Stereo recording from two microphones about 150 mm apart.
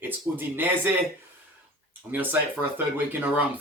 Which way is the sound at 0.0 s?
15° right (ahead or behind).